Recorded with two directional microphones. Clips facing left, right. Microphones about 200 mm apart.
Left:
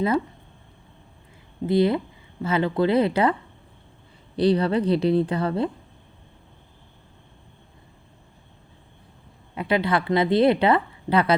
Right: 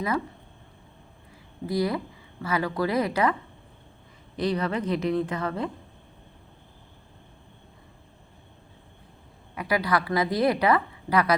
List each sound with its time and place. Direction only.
1.6 s a woman's voice: 25° left (ahead or behind)
4.4 s a woman's voice: 30° left (ahead or behind)
9.6 s a woman's voice: 25° left (ahead or behind)